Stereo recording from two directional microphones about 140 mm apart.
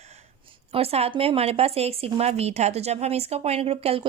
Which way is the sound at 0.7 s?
45° right (ahead or behind).